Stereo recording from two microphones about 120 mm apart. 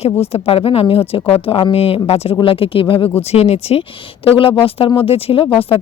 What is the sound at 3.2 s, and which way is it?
Speech, 60° left (ahead or behind).